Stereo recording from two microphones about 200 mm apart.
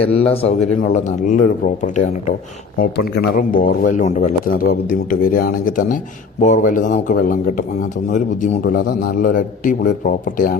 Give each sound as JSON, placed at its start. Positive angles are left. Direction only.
{"t": 0.0, "sound": "a man's voice", "side_deg": 30}